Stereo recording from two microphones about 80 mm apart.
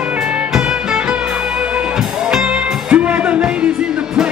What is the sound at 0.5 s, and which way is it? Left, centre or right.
Music, centre.